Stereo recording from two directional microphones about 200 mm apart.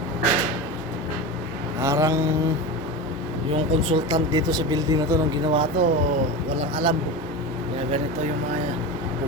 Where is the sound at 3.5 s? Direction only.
25° right (ahead or behind).